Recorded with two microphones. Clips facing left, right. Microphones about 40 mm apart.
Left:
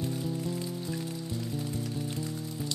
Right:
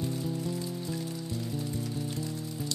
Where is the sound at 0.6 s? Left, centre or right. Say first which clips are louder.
Even; centre.